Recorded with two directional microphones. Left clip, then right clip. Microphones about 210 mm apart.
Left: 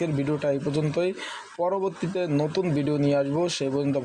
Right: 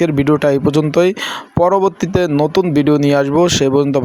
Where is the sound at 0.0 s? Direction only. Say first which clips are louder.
Right 13 dB; 35° right (ahead or behind).